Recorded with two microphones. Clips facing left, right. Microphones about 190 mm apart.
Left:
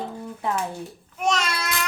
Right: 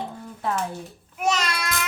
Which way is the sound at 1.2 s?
Centre (ahead or behind).